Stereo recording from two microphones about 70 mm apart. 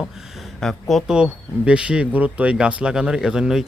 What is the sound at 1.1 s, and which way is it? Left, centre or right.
Speech, centre.